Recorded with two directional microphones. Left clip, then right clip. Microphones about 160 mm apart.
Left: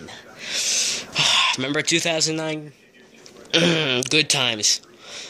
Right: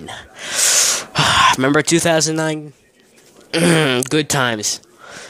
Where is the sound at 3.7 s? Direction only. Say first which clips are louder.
Right 4 dB; 50° right (ahead or behind).